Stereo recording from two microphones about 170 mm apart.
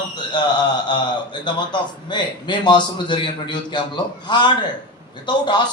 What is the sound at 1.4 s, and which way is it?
A man's voice, 25° left (ahead or behind).